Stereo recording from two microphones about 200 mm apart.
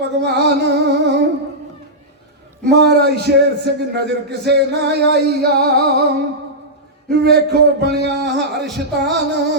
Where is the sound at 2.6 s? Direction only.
55° right (ahead or behind).